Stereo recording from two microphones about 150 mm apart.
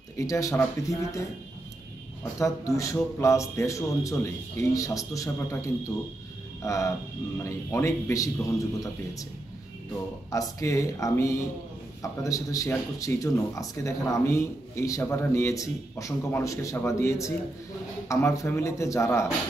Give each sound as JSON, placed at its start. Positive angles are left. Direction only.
{"t": 0.2, "sound": "speech", "side_deg": 20}
{"t": 2.3, "sound": "speech", "side_deg": 20}
{"t": 10.3, "sound": "speech", "side_deg": 20}